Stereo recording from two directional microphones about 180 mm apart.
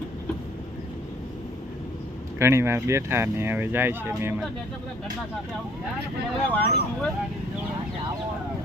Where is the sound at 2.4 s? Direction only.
15° right (ahead or behind).